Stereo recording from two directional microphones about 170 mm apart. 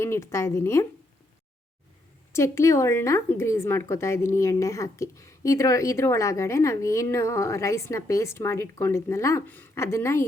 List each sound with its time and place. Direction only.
0.0 s speech: 15° left (ahead or behind)
2.3 s speech: 15° left (ahead or behind)